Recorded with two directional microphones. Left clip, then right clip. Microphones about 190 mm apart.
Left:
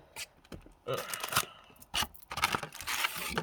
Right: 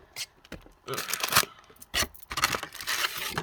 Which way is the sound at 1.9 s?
20° left (ahead or behind).